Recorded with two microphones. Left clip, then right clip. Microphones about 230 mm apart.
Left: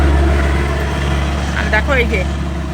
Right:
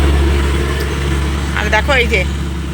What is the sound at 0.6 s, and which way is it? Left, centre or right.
Vehicle, left.